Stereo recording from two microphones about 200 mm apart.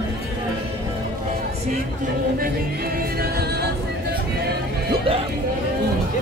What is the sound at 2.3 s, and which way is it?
Music, 50° right (ahead or behind).